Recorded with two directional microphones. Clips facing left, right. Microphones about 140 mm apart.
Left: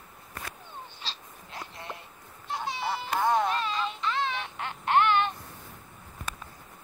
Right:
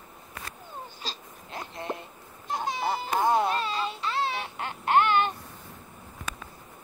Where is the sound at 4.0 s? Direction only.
35° right (ahead or behind).